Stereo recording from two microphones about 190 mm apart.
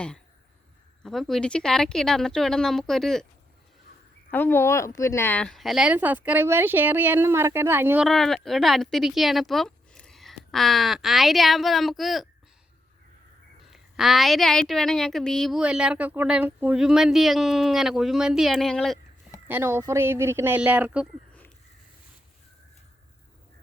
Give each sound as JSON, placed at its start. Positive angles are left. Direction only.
{"t": 1.0, "sound": "a woman's voice", "side_deg": 0}
{"t": 4.3, "sound": "speech", "side_deg": 10}
{"t": 8.0, "sound": "a woman's voice", "side_deg": 0}
{"t": 13.7, "sound": "a woman's voice", "side_deg": 0}
{"t": 19.5, "sound": "speech", "side_deg": -10}